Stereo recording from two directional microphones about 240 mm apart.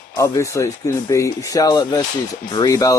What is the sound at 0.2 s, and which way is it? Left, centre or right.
Speech, centre.